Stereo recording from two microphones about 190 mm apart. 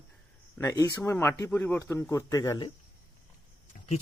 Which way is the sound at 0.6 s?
15° left (ahead or behind).